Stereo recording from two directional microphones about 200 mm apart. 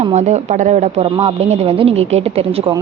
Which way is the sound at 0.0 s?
35° right (ahead or behind).